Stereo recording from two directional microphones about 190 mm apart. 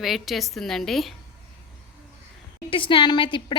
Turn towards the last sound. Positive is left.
turn(degrees=25)  # may be behind; listen again after turning